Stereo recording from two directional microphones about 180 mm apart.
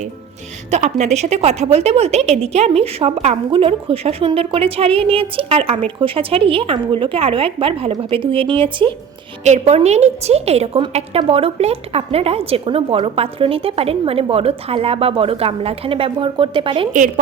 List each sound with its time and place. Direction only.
0.7 s a woman's voice: 40° right (ahead or behind)